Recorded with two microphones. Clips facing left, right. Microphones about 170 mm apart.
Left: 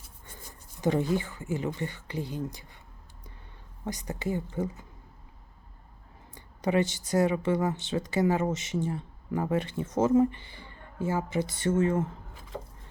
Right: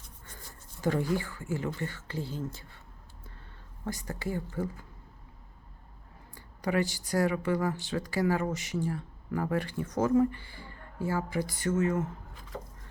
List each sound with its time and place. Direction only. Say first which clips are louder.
0.3 s speech: left 2 dB; 15° left (ahead or behind)
3.8 s speech: left 3 dB; 20° left (ahead or behind)
6.3 s speech: left 3 dB; 20° left (ahead or behind)